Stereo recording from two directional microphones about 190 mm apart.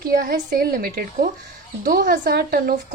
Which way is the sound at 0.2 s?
50° right (ahead or behind).